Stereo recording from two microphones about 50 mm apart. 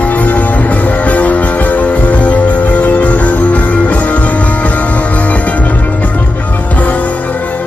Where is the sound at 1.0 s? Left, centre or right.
Left.